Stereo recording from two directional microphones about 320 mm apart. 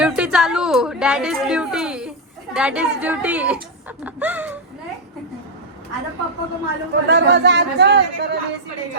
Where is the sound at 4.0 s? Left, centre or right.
Centre.